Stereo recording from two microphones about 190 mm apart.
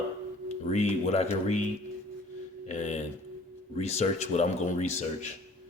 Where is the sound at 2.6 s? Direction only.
35° left (ahead or behind).